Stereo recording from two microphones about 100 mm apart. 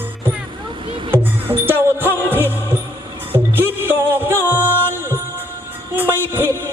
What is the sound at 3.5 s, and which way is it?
Music, 20° right (ahead or behind).